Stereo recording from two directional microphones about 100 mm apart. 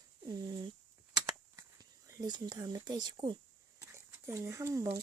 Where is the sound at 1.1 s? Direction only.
40° right (ahead or behind).